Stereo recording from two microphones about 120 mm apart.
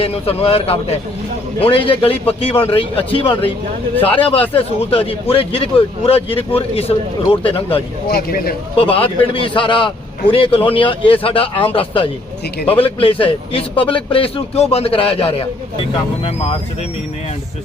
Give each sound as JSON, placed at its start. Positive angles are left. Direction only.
{"t": 0.0, "sound": "speech", "side_deg": 55}
{"t": 8.8, "sound": "speech", "side_deg": 50}